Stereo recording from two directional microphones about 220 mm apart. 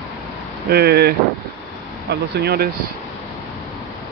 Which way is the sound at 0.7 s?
45° right (ahead or behind).